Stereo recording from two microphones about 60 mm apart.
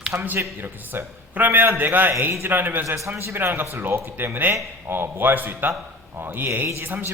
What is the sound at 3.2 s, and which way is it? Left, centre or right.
A man's voice, right.